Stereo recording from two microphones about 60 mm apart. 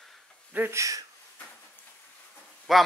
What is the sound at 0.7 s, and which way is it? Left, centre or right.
Speech, right.